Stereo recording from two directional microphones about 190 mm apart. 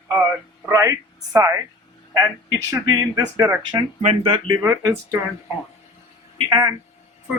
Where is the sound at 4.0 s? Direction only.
35° right (ahead or behind).